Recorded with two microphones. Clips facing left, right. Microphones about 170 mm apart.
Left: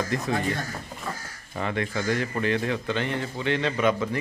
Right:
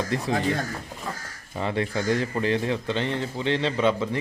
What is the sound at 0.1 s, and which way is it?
Speech, 30° right (ahead or behind).